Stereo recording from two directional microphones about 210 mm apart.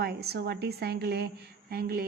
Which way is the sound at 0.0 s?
50° right (ahead or behind).